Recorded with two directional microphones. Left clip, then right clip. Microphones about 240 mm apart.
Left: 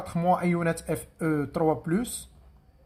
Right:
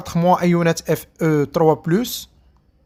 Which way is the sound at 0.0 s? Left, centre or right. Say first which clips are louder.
Right 8 dB; right.